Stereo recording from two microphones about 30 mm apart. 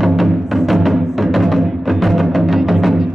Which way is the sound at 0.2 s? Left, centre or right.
Centre.